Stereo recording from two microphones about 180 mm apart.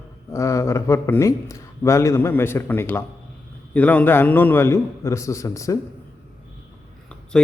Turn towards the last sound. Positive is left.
turn(degrees=5)  # may be behind; listen again after turning